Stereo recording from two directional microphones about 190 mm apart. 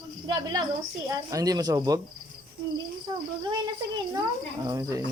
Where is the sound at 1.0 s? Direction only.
20° right (ahead or behind).